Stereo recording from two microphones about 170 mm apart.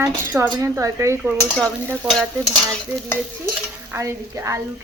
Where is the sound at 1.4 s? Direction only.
5° left (ahead or behind).